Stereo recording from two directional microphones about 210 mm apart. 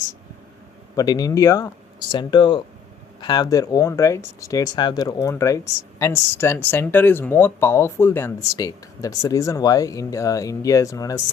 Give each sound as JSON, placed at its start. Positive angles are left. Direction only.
{"t": 0.9, "sound": "speech", "side_deg": 20}